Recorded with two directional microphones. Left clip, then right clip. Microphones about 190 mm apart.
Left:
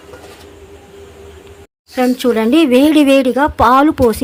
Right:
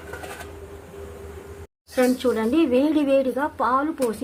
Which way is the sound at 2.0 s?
30° left (ahead or behind).